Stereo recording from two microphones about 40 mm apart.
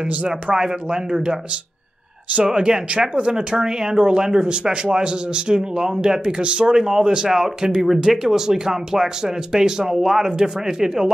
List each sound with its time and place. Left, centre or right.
0.6 s speech: centre